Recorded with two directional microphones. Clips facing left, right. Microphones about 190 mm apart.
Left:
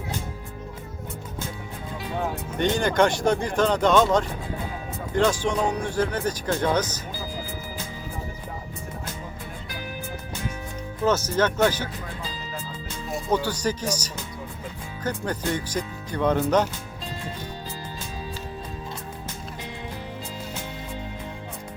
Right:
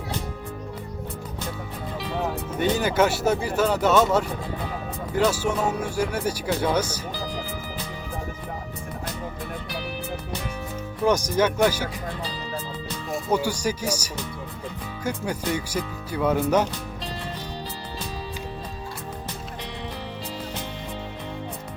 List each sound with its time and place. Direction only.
2.6 s speech: 5° right (ahead or behind)
11.0 s speech: 15° right (ahead or behind)
13.3 s speech: 10° right (ahead or behind)